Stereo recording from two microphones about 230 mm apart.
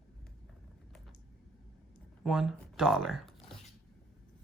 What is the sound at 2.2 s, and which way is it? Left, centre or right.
Speech, centre.